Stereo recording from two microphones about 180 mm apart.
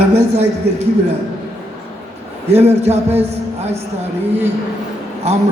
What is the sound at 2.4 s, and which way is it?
Speech, 35° right (ahead or behind).